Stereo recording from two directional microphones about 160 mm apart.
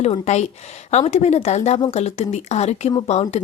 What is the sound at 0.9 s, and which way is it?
A woman's voice, 45° left (ahead or behind).